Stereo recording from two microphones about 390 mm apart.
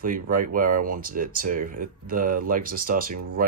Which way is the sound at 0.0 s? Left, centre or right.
Right.